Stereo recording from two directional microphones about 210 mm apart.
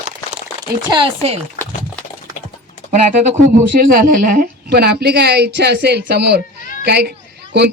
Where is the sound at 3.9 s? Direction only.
40° right (ahead or behind).